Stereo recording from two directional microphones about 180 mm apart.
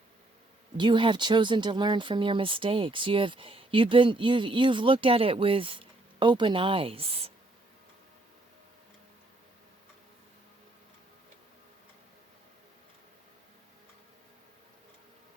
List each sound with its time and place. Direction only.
0.8 s speech: 25° right (ahead or behind)